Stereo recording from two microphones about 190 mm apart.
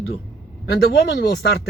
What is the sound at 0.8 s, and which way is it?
Speech, 55° left (ahead or behind).